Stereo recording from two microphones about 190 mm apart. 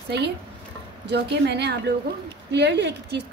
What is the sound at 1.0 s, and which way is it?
A woman's voice, 65° right (ahead or behind).